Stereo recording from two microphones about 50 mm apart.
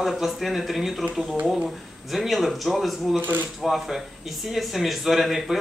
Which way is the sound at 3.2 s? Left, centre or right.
Right.